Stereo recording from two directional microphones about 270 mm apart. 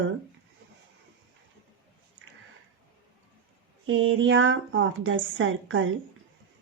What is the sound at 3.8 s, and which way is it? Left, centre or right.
Speech, right.